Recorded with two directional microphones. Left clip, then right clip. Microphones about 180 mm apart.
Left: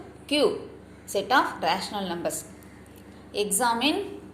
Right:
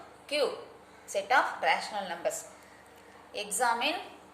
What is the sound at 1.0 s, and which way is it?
A woman's voice, 20° left (ahead or behind).